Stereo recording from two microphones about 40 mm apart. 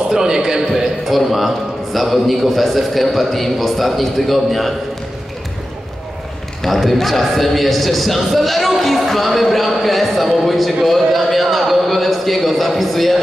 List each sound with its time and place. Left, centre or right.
0.1 s a man's voice: centre
1.0 s a man's voice: centre
6.6 s a man's voice: centre